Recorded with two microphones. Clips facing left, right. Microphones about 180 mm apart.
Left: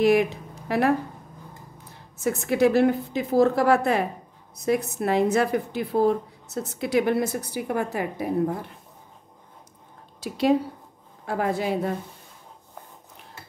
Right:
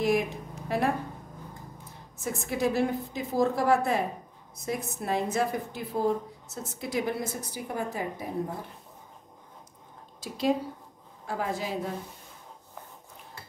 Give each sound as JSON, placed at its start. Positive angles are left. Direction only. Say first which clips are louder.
{"t": 0.0, "sound": "a sound", "louder": "left 7 dB", "side_deg": 70}
{"t": 2.1, "sound": "a woman's voice", "louder": "left 8 dB", "side_deg": 75}
{"t": 10.2, "sound": "a woman's voice", "louder": "left 6 dB", "side_deg": 70}